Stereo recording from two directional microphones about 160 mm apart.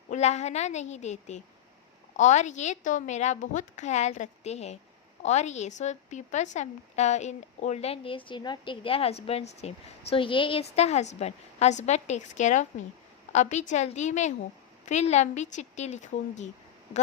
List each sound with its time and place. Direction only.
0.1 s a woman's voice: 45° left (ahead or behind)